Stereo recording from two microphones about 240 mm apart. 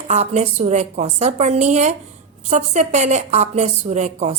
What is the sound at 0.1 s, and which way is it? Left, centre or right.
A woman's voice, right.